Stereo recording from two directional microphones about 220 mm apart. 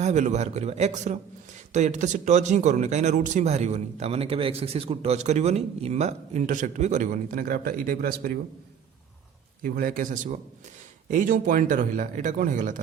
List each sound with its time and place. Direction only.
0.0 s speech: 30° right (ahead or behind)
9.6 s speech: 40° right (ahead or behind)